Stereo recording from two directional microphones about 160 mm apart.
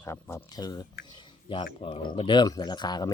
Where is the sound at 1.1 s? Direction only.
30° left (ahead or behind).